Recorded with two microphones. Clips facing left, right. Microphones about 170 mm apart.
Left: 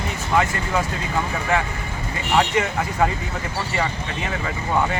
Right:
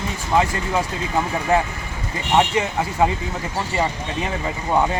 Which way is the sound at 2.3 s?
20° right (ahead or behind).